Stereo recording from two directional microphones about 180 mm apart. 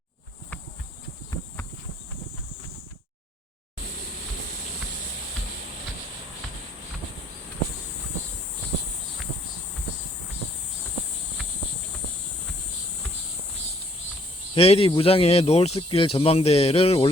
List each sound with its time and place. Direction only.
14.5 s speech: 35° left (ahead or behind)